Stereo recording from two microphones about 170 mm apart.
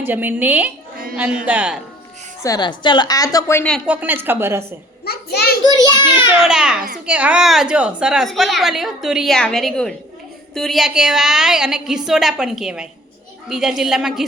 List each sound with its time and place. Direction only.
0.0 s a woman's voice: 10° right (ahead or behind)
2.4 s a woman's voice: 25° left (ahead or behind)
3.8 s a woman's voice: 10° right (ahead or behind)
5.0 s a sound: 70° left (ahead or behind)
5.8 s a sound: 25° left (ahead or behind)
6.4 s a woman's voice: 5° right (ahead or behind)